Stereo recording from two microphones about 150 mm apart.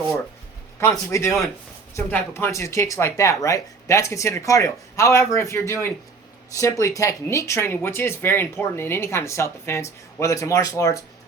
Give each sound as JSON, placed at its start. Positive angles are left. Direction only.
{"t": 0.8, "sound": "a man's voice", "side_deg": 20}